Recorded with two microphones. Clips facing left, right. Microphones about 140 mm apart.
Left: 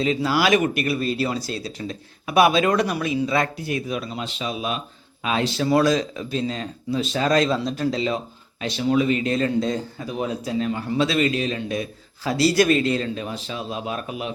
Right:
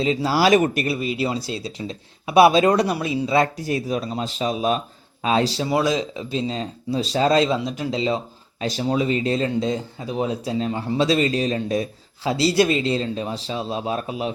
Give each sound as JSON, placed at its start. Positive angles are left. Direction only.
{"t": 0.0, "sound": "speech", "side_deg": -30}
{"t": 0.9, "sound": "speech", "side_deg": -15}
{"t": 5.6, "sound": "speech", "side_deg": -20}
{"t": 8.6, "sound": "speech", "side_deg": -35}